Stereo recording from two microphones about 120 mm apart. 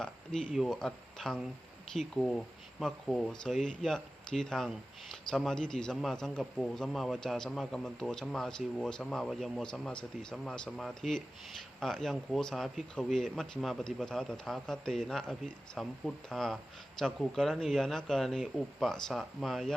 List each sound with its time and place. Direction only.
0.0 s a man's voice: 5° left (ahead or behind)